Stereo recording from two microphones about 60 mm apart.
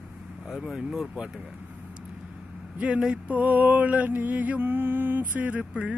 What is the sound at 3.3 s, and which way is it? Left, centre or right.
Mantra, right.